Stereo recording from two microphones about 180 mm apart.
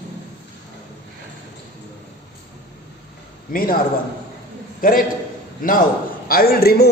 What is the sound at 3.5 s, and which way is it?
Speech, 55° left (ahead or behind).